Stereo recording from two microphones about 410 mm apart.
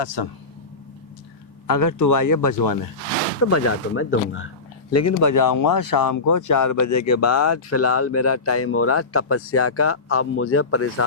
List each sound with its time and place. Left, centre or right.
0.0 s speech: left
1.6 s speech: left
3.4 s speech: left
4.9 s speech: left